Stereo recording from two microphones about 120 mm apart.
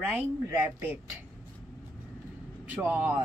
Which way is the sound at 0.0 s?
15° right (ahead or behind).